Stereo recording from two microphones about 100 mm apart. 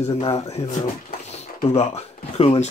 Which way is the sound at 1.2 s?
90° left.